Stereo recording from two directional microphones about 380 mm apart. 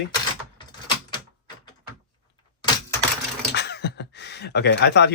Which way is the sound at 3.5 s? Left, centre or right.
Left.